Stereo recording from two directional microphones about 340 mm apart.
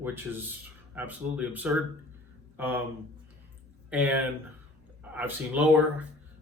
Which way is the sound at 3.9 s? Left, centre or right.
Centre.